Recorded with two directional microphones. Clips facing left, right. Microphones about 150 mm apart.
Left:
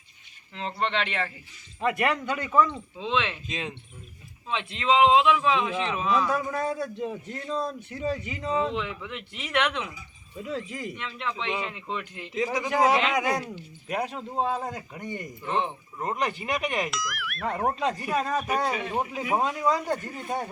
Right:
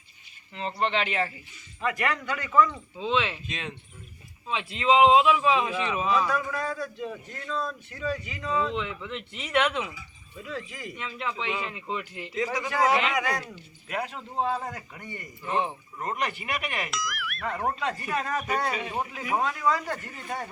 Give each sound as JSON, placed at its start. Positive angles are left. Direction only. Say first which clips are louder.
{"t": 0.5, "sound": "speech", "louder": "right 1 dB", "side_deg": -5}
{"t": 1.8, "sound": "a man's voice", "louder": "left 3 dB", "side_deg": 25}
{"t": 3.0, "sound": "speech", "louder": "right 1 dB", "side_deg": 0}
{"t": 4.4, "sound": "speech", "louder": "right 1 dB", "side_deg": -5}
{"t": 6.3, "sound": "a man's voice", "louder": "left 2 dB", "side_deg": 25}
{"t": 8.7, "sound": "speech", "louder": "even", "side_deg": 0}
{"t": 9.9, "sound": "speech", "louder": "left 2 dB", "side_deg": 20}
{"t": 10.9, "sound": "speech", "louder": "even", "side_deg": -5}
{"t": 12.3, "sound": "a man's voice", "louder": "left 3 dB", "side_deg": 15}
{"t": 15.4, "sound": "speech", "louder": "even", "side_deg": -5}
{"t": 16.0, "sound": "a man's voice", "louder": "left 2 dB", "side_deg": 15}
{"t": 16.9, "sound": "speech", "louder": "even", "side_deg": 0}
{"t": 17.7, "sound": "a man's voice", "louder": "left 3 dB", "side_deg": 15}